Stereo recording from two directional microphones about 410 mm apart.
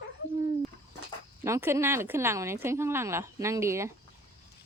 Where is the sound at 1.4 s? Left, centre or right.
Centre.